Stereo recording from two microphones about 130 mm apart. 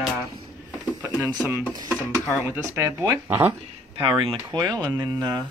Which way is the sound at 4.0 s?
35° right (ahead or behind).